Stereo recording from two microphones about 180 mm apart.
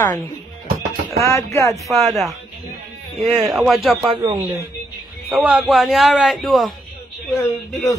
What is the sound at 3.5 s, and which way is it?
Speech, centre (ahead or behind).